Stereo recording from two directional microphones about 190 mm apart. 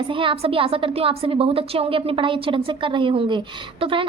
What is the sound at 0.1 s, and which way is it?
A woman's voice, 25° right (ahead or behind).